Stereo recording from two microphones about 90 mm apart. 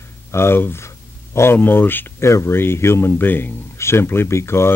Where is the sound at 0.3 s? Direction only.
30° left (ahead or behind).